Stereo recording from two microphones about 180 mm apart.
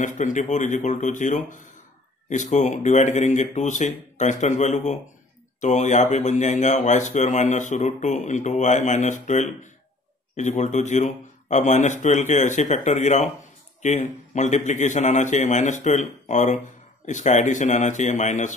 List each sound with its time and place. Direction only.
0.0 s a man's voice: 45° left (ahead or behind)